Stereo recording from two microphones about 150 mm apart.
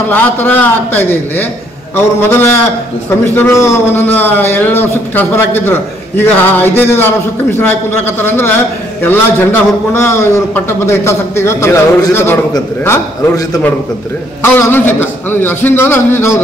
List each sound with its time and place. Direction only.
0.1 s a man's voice: 10° left (ahead or behind)
14.4 s a man's voice: 15° left (ahead or behind)